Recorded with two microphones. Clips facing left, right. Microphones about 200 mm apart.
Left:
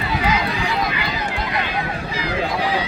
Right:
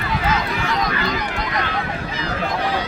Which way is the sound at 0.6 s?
15° left (ahead or behind).